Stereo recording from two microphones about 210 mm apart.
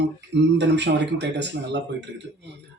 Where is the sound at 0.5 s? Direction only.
55° right (ahead or behind).